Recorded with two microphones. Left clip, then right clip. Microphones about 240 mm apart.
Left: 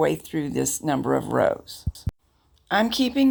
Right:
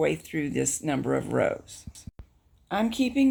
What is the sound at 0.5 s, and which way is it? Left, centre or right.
Speech, centre.